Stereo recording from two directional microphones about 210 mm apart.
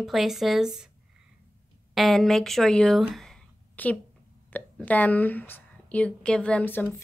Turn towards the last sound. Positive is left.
turn(degrees=5)  # may be behind; listen again after turning